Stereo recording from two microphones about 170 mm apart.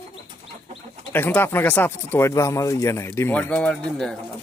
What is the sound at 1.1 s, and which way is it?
Speech, 10° left (ahead or behind).